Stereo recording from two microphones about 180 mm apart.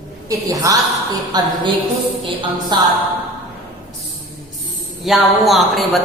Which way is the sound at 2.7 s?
25° right (ahead or behind).